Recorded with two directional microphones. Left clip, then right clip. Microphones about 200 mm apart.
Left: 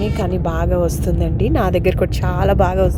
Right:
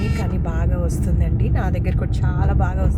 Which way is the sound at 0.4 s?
30° left (ahead or behind).